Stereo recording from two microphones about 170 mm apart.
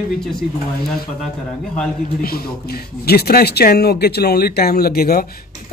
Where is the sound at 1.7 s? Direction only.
60° left (ahead or behind).